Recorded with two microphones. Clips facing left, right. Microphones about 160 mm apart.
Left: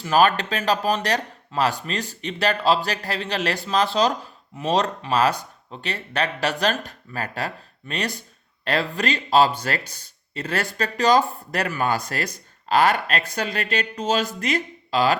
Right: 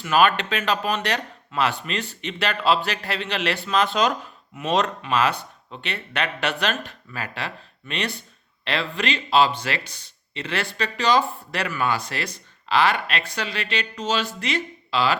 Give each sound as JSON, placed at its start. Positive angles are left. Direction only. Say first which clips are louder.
{"t": 0.0, "sound": "speech", "louder": "left 1 dB", "side_deg": 35}